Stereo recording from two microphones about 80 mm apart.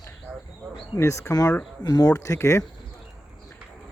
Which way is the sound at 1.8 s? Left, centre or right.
Left.